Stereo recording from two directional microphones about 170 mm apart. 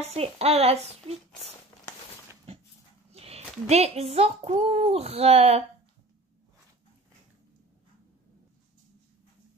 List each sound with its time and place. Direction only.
0.0 s speech: 35° right (ahead or behind)
3.1 s speech: 35° right (ahead or behind)